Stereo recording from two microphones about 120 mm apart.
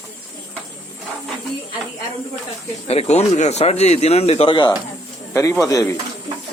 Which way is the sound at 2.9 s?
65° left (ahead or behind).